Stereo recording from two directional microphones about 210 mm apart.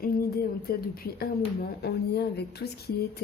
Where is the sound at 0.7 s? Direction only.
45° left (ahead or behind).